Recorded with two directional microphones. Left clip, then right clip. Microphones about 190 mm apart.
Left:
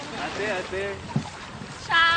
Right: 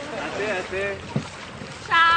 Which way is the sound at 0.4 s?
15° left (ahead or behind).